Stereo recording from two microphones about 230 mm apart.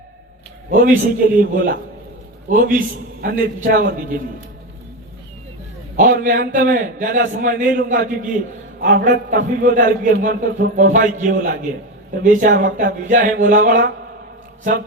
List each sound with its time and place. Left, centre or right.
0.7 s a man's voice: right
6.0 s a man's voice: right